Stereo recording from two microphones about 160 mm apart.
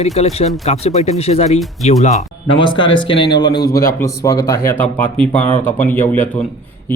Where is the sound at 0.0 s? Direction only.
40° left (ahead or behind).